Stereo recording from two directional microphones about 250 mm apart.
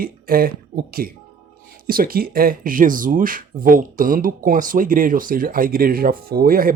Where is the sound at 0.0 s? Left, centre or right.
Right.